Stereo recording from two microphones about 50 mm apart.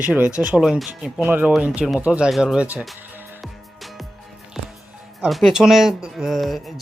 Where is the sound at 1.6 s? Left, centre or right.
Right.